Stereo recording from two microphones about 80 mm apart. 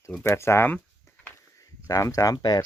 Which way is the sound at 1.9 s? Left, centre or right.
Left.